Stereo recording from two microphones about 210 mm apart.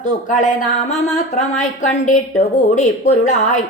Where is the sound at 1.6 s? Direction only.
35° left (ahead or behind).